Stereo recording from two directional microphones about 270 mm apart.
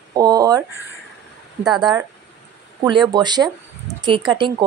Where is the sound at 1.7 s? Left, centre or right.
Centre.